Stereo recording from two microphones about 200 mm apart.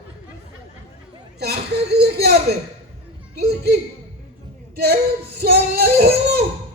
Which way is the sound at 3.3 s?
55° right (ahead or behind).